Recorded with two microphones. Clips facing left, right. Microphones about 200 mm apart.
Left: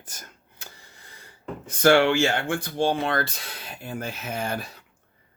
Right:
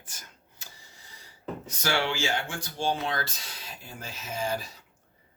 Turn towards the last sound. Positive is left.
turn(degrees=60)  # may be behind; listen again after turning